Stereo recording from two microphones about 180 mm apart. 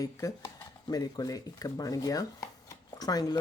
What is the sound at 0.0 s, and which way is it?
Speech, 20° left (ahead or behind).